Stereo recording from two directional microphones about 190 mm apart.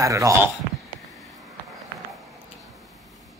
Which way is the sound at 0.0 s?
15° right (ahead or behind).